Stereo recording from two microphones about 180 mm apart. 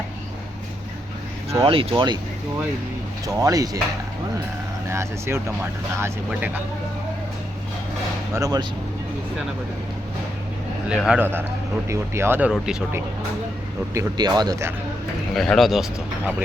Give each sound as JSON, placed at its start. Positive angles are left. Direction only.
{"t": 1.6, "sound": "speech", "side_deg": -30}
{"t": 3.2, "sound": "speech", "side_deg": -20}
{"t": 4.9, "sound": "speech", "side_deg": -15}
{"t": 8.3, "sound": "speech", "side_deg": -20}
{"t": 10.8, "sound": "speech", "side_deg": -5}
{"t": 13.9, "sound": "speech", "side_deg": -20}
{"t": 15.4, "sound": "speech", "side_deg": 0}